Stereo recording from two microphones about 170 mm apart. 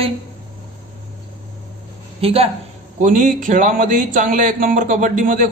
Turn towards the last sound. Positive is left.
turn(degrees=-50)  # may be behind; listen again after turning